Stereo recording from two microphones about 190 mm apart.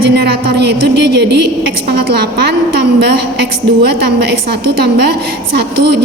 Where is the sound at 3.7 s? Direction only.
60° right (ahead or behind).